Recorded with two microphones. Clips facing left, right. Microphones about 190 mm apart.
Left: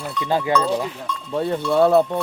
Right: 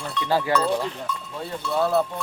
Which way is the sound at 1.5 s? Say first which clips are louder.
Left 7 dB; 60° left (ahead or behind).